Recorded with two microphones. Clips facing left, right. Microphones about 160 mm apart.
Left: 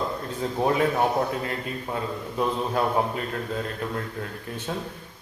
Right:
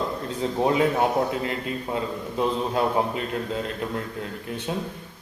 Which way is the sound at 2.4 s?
20° right (ahead or behind).